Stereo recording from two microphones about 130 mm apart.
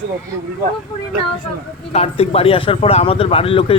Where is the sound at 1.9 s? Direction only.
50° left (ahead or behind).